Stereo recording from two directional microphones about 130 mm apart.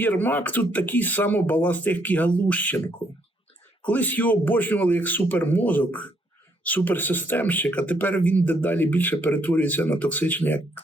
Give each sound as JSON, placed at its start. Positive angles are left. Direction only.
{"t": 0.0, "sound": "speech", "side_deg": 15}
{"t": 3.8, "sound": "speech", "side_deg": 10}